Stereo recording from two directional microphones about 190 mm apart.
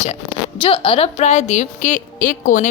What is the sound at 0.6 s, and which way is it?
A woman's voice, 25° left (ahead or behind).